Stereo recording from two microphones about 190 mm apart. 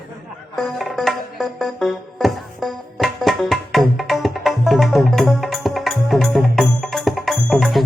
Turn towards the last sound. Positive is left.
turn(degrees=0)  # may be behind; listen again after turning